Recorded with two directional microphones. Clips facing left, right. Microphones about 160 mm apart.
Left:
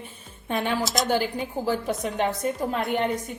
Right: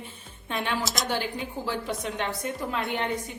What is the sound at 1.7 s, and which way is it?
A woman's voice, 45° left (ahead or behind).